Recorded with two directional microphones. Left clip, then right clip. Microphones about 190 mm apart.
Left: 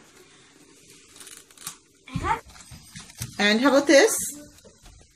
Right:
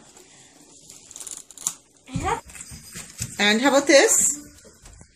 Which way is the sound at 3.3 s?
35° left (ahead or behind).